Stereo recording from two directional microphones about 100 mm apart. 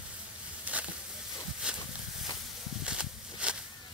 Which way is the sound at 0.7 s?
15° right (ahead or behind).